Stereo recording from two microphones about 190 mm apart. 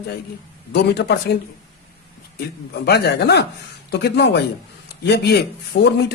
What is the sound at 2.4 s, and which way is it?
Speech, 60° left (ahead or behind).